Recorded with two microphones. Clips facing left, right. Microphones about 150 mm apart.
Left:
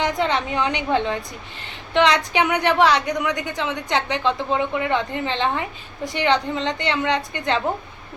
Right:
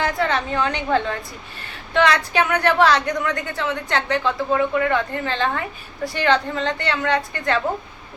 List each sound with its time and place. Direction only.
0.0 s a woman's voice: 20° left (ahead or behind)